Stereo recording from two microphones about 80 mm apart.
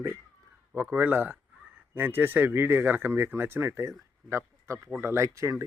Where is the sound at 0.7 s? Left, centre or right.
Right.